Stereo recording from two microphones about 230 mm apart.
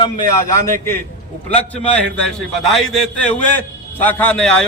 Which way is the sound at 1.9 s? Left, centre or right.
Centre.